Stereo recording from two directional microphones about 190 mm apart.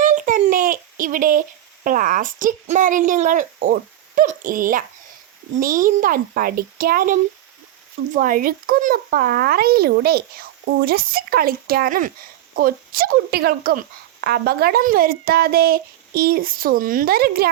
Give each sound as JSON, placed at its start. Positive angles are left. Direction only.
{"t": 0.0, "sound": "a child's voice", "side_deg": -45}